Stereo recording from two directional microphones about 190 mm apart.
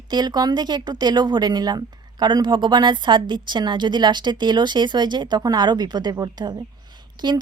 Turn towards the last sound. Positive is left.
turn(degrees=-25)  # may be behind; listen again after turning